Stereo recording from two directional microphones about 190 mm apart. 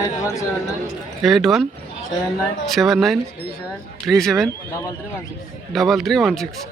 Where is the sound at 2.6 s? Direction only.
Centre (ahead or behind).